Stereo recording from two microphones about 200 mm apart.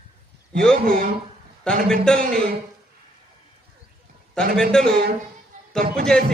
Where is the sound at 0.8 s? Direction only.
45° right (ahead or behind).